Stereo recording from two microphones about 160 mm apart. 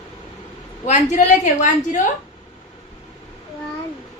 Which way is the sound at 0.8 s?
45° left (ahead or behind).